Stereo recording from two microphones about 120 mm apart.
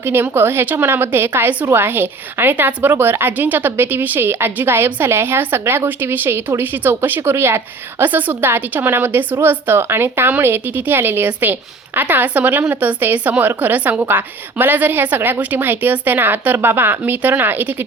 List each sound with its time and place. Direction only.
0.0 s a woman's voice: 20° right (ahead or behind)